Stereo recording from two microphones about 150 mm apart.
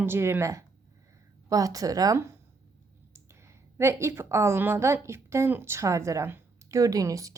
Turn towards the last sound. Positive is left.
turn(degrees=-20)  # may be behind; listen again after turning